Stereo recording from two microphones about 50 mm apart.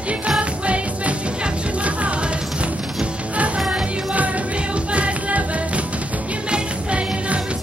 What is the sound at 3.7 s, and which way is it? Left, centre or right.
Music, right.